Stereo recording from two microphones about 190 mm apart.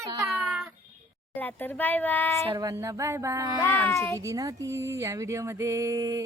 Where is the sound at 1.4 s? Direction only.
10° left (ahead or behind).